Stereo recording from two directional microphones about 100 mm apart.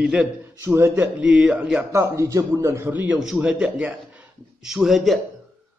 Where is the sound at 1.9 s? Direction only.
30° right (ahead or behind).